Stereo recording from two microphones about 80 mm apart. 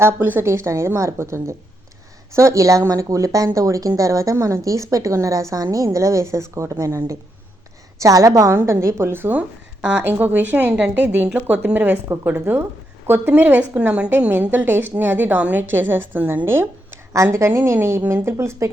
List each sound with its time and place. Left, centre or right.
0.0 s a woman's voice: right
14.1 s a woman's voice: right